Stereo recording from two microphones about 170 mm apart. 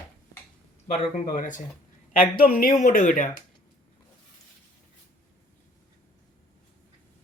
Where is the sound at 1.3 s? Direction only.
50° left (ahead or behind).